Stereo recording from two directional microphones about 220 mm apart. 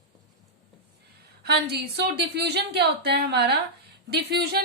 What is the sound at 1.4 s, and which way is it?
A woman's voice, 50° right (ahead or behind).